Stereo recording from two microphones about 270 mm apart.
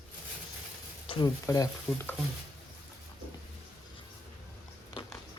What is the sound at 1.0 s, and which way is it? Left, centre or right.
Speech, centre.